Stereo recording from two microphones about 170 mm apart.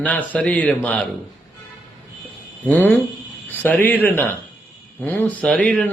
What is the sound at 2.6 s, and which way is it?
A man's voice, 10° left (ahead or behind).